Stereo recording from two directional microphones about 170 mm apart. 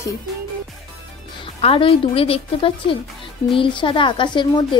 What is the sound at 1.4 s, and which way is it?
A woman's voice, 30° left (ahead or behind).